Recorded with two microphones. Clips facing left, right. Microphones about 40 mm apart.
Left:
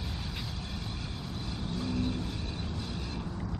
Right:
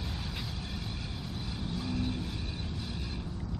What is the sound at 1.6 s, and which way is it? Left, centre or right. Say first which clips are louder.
Vehicle: left 2 dB; centre.